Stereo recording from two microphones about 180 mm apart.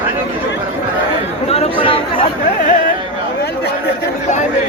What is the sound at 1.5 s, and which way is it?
Speech, 30° left (ahead or behind).